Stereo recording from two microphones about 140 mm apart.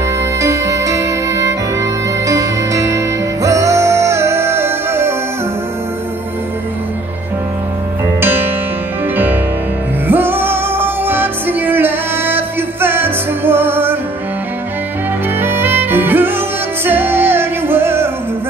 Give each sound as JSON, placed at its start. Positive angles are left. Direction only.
{"t": 0.4, "sound": "music", "side_deg": -20}
{"t": 8.2, "sound": "music", "side_deg": -15}
{"t": 15.4, "sound": "music", "side_deg": -15}